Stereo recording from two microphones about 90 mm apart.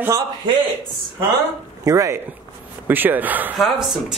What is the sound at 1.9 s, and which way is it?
Speech, 35° right (ahead or behind).